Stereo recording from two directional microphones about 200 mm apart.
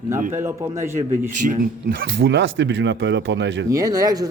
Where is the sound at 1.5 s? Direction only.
45° right (ahead or behind); by 3.7 s 60° right (ahead or behind).